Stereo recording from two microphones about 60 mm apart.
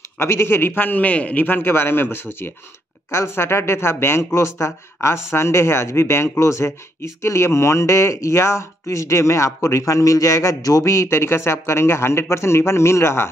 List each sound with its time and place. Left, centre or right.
0.2 s a man's voice: left
10.8 s speech: left